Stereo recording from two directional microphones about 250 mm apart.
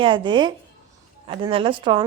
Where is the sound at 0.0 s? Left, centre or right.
Centre.